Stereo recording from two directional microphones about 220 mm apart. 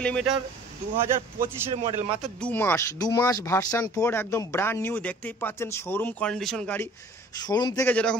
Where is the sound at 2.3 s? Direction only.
5° left (ahead or behind).